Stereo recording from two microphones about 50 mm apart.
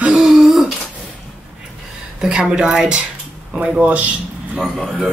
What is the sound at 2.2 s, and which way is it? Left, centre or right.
Speech, centre.